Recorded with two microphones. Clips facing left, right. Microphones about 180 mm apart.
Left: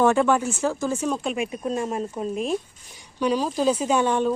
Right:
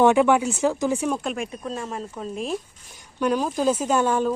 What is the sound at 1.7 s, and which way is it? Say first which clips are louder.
Speech: left 5 dB; 25° left (ahead or behind).